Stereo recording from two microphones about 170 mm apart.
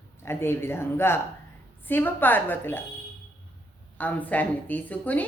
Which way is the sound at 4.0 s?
10° left (ahead or behind).